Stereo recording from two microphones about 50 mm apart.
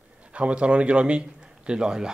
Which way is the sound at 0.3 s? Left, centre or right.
Right.